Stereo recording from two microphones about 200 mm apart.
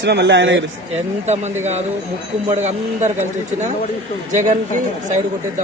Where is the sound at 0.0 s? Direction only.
60° right (ahead or behind).